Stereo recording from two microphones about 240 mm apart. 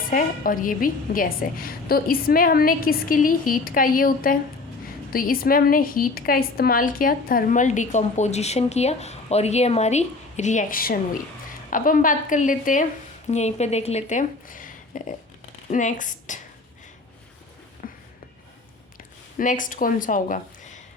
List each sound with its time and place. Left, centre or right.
0.1 s a woman's voice: left
17.8 s a sound: left
19.4 s a woman's voice: left